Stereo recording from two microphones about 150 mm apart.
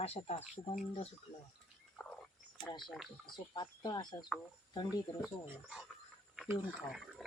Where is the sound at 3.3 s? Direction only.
30° left (ahead or behind).